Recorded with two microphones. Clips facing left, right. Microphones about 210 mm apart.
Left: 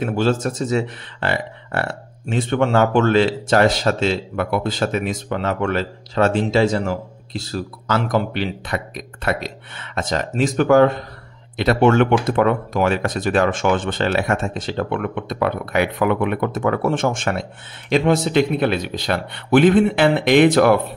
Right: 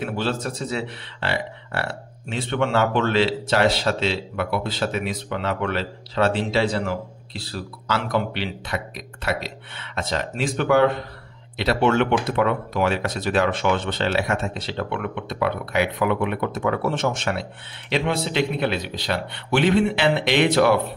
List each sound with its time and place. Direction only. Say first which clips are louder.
0.0 s speech: left 6 dB; 45° left (ahead or behind)